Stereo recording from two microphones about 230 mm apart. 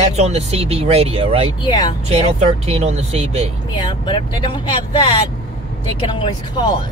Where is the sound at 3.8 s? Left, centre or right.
Centre.